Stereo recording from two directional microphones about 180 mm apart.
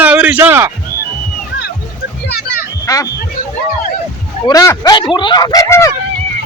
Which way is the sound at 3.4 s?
50° left (ahead or behind).